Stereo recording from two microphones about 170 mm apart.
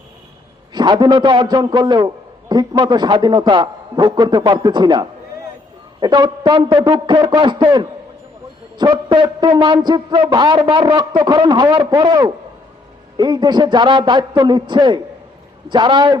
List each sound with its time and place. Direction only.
0.7 s a man's voice: 25° right (ahead or behind)